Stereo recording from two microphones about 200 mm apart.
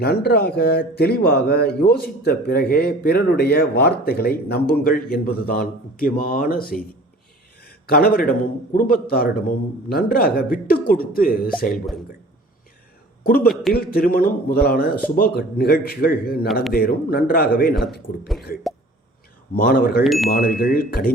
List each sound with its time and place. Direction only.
0.0 s speech: 50° left (ahead or behind)
7.6 s a sound: 50° left (ahead or behind)
8.7 s speech: 45° left (ahead or behind)
13.2 s speech: 45° left (ahead or behind)
13.5 s a man's voice: centre (ahead or behind)
13.7 s speech: 50° left (ahead or behind)
19.5 s speech: 50° left (ahead or behind)
20.1 s a man's voice: centre (ahead or behind)
20.3 s speech: 50° left (ahead or behind)